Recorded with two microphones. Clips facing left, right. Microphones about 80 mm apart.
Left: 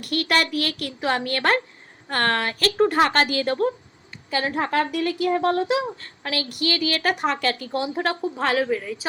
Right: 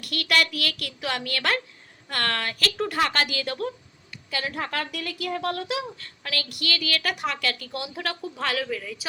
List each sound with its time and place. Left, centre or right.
0.0 s a woman's voice: left